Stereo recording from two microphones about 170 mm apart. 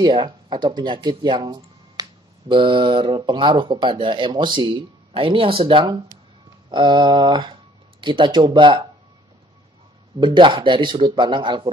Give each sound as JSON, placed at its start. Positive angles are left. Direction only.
{"t": 0.0, "sound": "speech", "side_deg": -25}
{"t": 10.2, "sound": "speech", "side_deg": -30}